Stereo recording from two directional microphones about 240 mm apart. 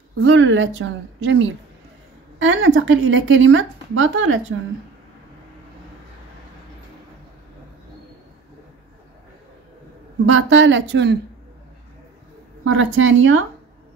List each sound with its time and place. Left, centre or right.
0.2 s speech: right
10.2 s speech: right
12.6 s speech: right